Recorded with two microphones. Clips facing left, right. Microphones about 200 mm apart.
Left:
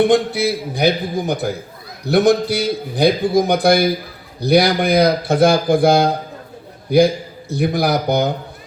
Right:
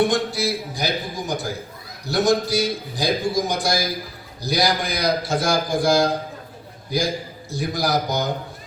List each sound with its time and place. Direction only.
0.0 s a man's voice: 60° left (ahead or behind)